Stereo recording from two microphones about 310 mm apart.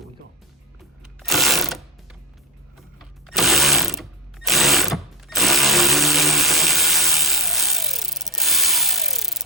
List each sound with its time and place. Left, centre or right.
1.2 s mechanisms: centre
3.2 s ratchet: centre